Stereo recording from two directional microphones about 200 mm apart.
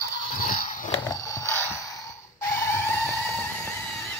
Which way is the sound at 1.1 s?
15° left (ahead or behind).